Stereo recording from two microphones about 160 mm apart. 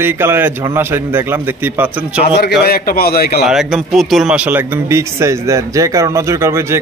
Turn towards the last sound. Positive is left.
turn(degrees=-15)  # may be behind; listen again after turning